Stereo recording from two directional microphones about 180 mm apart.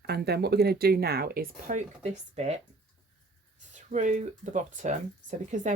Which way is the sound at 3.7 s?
45° right (ahead or behind).